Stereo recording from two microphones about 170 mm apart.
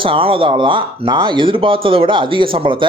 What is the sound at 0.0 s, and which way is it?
Speech, 30° right (ahead or behind).